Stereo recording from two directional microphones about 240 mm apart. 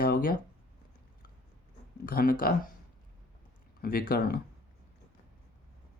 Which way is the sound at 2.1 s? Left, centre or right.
Left.